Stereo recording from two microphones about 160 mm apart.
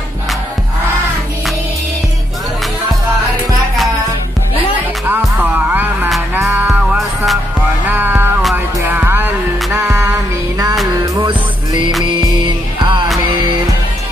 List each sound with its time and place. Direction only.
6.4 s music: 5° right (ahead or behind); by 11.3 s 25° right (ahead or behind)
12.8 s music: 30° right (ahead or behind)